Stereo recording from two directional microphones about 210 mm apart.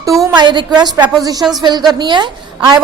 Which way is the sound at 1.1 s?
20° right (ahead or behind).